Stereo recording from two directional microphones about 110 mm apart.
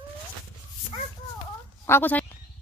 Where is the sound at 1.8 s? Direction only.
20° left (ahead or behind).